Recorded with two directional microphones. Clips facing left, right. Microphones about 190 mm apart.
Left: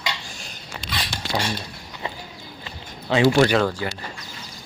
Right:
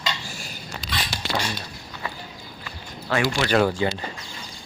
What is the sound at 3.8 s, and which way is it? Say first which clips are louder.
Speech: right 5 dB; 20° right (ahead or behind).